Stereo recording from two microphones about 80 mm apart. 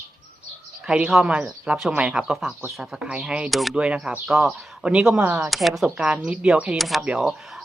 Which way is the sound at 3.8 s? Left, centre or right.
Centre.